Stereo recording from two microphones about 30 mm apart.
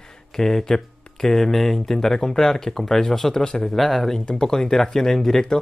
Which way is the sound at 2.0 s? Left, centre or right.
Centre.